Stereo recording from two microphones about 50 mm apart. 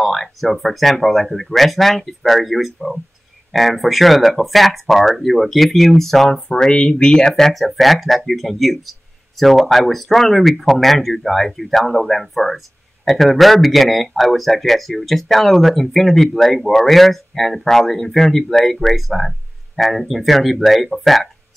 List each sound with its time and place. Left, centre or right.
0.0 s speech: centre
6.5 s speech: centre
7.5 s speech: centre